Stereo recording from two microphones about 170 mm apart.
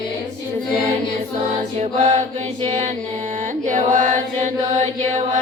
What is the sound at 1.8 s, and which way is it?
Mantra, 40° right (ahead or behind).